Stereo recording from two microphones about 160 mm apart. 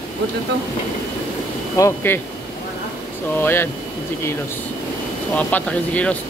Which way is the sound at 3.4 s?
15° left (ahead or behind).